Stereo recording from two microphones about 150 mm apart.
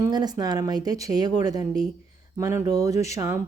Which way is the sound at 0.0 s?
25° right (ahead or behind).